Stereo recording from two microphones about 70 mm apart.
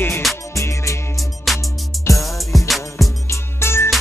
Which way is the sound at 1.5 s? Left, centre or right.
Centre.